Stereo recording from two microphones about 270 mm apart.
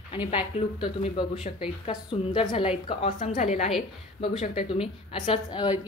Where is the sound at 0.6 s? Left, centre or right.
Left.